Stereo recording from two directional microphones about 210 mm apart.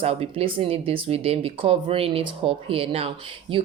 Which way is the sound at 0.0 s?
30° right (ahead or behind).